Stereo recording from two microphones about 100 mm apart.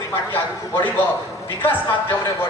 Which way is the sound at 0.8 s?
20° left (ahead or behind).